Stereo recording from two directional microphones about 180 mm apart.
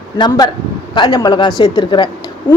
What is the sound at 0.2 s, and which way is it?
A man's voice, 20° left (ahead or behind).